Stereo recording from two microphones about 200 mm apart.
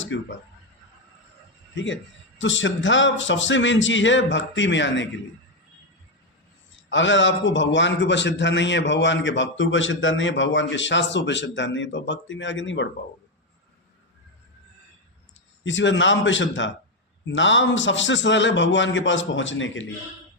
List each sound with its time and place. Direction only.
0.0 s speech: 70° left (ahead or behind)
1.7 s a man's voice: 65° left (ahead or behind)
6.9 s a man's voice: 70° left (ahead or behind)
15.6 s a man's voice: 65° left (ahead or behind)